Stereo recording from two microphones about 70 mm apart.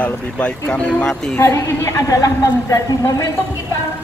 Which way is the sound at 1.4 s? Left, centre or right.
Left.